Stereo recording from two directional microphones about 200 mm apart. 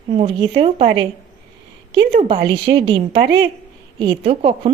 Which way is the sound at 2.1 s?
25° right (ahead or behind).